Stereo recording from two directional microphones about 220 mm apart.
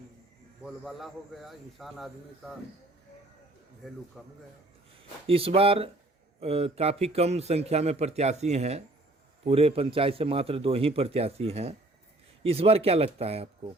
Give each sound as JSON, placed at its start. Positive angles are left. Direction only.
{"t": 0.6, "sound": "a man's voice", "side_deg": 0}
{"t": 3.8, "sound": "a man's voice", "side_deg": 0}
{"t": 5.2, "sound": "a man's voice", "side_deg": -25}